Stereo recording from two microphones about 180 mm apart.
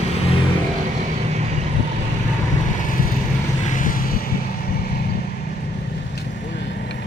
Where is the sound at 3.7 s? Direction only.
45° left (ahead or behind).